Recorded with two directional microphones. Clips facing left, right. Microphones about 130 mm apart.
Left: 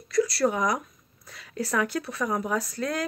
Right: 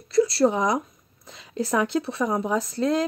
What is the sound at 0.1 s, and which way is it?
A woman's voice, 25° right (ahead or behind).